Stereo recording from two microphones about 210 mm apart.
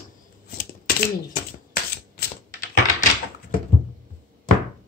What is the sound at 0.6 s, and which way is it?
Shuffling cards, 45° left (ahead or behind).